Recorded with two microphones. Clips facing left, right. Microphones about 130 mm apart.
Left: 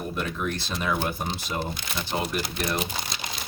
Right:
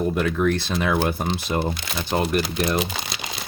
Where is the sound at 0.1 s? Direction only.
85° right.